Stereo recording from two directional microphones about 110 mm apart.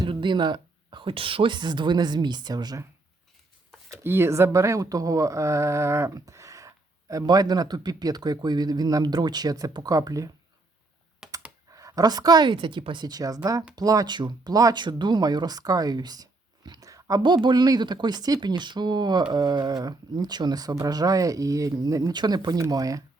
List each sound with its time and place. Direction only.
0.0 s speech: 45° right (ahead or behind)
3.8 s speech: 20° right (ahead or behind)
11.2 s computer keyboard: 5° right (ahead or behind)
11.7 s speech: 30° right (ahead or behind)